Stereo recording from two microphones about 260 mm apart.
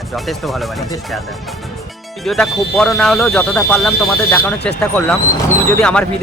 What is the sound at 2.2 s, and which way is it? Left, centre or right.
Speech, centre.